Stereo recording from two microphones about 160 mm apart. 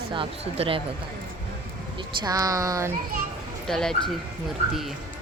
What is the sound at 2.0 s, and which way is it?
Speech, 25° right (ahead or behind).